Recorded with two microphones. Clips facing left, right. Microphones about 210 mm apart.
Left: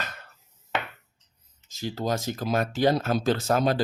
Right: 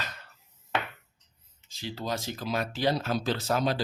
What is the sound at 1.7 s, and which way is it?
Speech, 45° left (ahead or behind).